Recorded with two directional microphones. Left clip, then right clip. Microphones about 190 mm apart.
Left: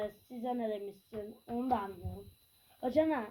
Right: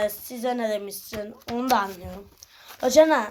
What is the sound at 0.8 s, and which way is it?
Speech, 45° right (ahead or behind).